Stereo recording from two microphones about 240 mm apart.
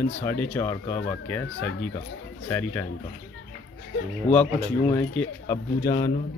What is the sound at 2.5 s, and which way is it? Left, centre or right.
Speech, centre.